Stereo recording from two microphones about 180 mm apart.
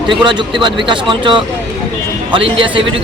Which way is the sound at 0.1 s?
25° right (ahead or behind).